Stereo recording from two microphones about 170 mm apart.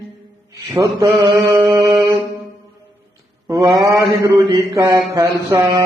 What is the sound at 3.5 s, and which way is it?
Mantra, 20° right (ahead or behind).